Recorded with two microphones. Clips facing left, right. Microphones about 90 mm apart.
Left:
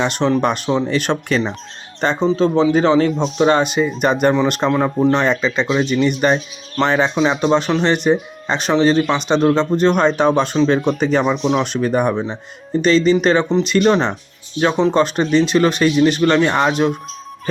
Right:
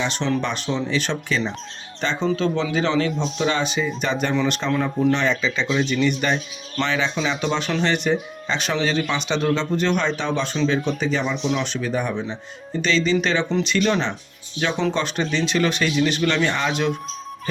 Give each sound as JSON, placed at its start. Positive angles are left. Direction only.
{"t": 0.0, "sound": "speech", "side_deg": 50}
{"t": 2.2, "sound": "speech", "side_deg": 35}
{"t": 4.7, "sound": "speech", "side_deg": 35}